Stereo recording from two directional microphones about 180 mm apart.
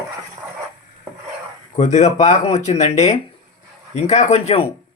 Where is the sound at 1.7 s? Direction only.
40° left (ahead or behind).